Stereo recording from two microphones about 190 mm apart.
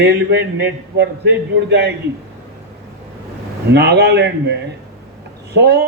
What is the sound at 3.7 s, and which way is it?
Speech, 60° right (ahead or behind).